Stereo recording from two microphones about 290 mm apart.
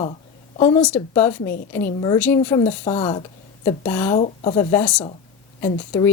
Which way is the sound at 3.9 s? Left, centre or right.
Centre.